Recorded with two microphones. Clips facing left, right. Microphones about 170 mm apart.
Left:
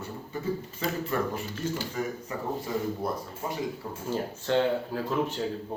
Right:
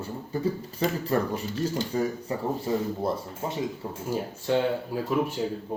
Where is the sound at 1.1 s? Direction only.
35° right (ahead or behind).